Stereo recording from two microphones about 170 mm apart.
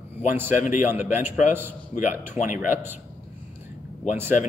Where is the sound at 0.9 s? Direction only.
10° right (ahead or behind).